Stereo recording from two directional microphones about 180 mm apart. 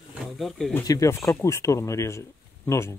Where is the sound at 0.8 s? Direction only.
20° left (ahead or behind).